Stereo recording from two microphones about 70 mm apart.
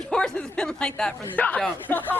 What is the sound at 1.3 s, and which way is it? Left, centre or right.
Speech, left.